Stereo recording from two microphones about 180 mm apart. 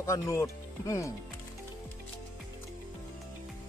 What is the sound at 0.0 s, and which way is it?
Speech, 15° left (ahead or behind).